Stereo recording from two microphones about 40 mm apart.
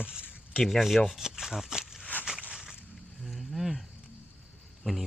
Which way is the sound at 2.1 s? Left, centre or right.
Left.